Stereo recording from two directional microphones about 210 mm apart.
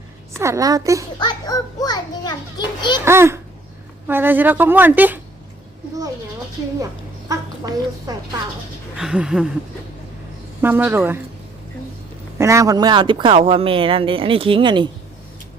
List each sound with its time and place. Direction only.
0.3 s a woman's voice: 15° right (ahead or behind)
1.2 s a child's voice: 20° left (ahead or behind)
3.0 s a woman's voice: 10° right (ahead or behind)
7.3 s a woman's voice: 15° right (ahead or behind)
9.0 s speech: 5° right (ahead or behind)
10.6 s a woman's voice: 10° right (ahead or behind)
12.4 s speech: 15° right (ahead or behind)